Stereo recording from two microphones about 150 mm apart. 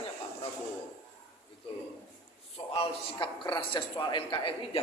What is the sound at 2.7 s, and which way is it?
A man's voice, 30° left (ahead or behind).